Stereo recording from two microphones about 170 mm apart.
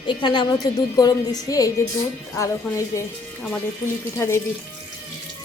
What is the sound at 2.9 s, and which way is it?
Speech, 20° left (ahead or behind).